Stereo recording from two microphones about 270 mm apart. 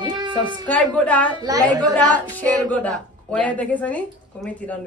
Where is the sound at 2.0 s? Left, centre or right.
Centre.